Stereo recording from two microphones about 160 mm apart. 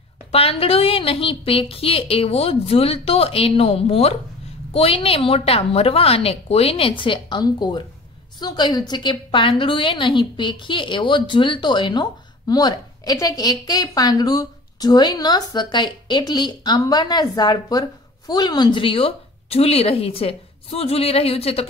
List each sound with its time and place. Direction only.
0.3 s a woman's voice: 35° left (ahead or behind)